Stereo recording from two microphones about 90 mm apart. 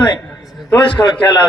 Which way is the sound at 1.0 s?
30° left (ahead or behind).